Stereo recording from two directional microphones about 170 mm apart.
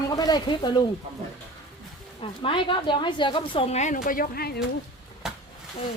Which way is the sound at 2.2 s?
30° left (ahead or behind).